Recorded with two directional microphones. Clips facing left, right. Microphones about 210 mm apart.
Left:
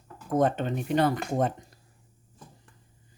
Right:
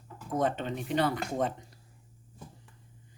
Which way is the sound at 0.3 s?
50° left (ahead or behind).